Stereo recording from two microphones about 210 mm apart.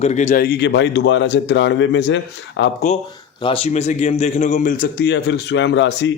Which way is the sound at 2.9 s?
35° left (ahead or behind).